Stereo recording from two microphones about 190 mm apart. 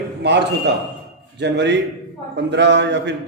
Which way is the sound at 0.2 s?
65° right (ahead or behind).